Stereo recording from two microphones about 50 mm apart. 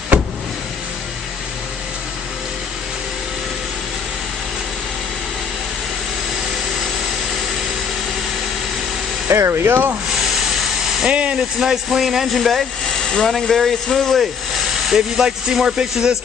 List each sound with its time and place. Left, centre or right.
9.3 s speech: right
11.1 s a sound: right
11.6 s speech: centre
14.9 s speech: centre